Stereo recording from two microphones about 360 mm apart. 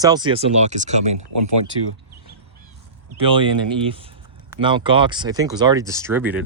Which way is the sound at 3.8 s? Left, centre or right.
Centre.